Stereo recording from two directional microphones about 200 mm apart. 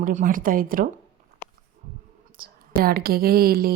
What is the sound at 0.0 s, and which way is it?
Speech, 40° right (ahead or behind).